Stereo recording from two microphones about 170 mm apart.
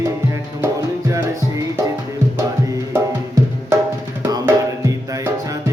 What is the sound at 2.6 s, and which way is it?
Music, 20° right (ahead or behind).